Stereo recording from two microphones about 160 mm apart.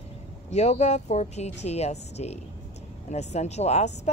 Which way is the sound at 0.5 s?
45° left (ahead or behind).